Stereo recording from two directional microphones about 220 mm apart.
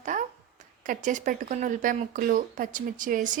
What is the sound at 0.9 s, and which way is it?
Speech, 35° right (ahead or behind).